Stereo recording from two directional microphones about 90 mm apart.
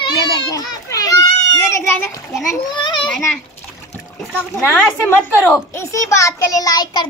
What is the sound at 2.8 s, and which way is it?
Speech, 60° left (ahead or behind).